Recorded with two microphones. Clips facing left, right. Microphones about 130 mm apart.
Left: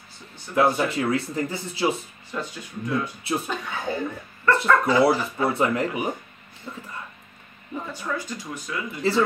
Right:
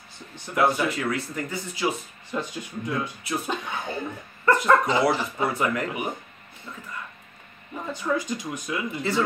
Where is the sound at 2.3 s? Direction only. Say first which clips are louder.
Right 1 dB; 20° right (ahead or behind).